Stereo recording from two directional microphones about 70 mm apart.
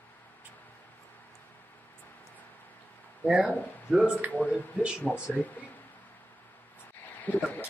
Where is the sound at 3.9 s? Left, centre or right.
Centre.